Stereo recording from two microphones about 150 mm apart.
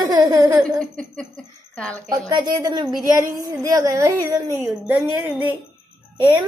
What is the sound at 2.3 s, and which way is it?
A woman's voice, 30° right (ahead or behind).